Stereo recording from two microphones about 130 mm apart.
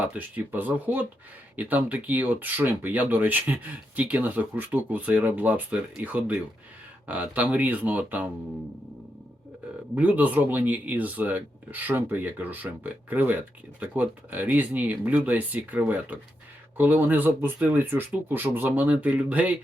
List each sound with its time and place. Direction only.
0.0 s speech: 10° right (ahead or behind)
9.9 s speech: 10° right (ahead or behind)